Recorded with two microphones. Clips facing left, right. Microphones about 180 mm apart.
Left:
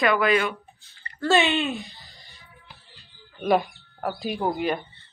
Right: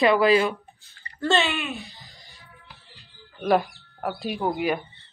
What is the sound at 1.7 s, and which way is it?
Speech, centre (ahead or behind).